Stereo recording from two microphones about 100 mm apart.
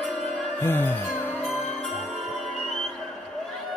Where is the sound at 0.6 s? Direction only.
20° left (ahead or behind).